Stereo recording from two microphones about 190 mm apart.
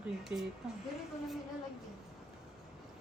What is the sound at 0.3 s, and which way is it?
Speech, 10° right (ahead or behind).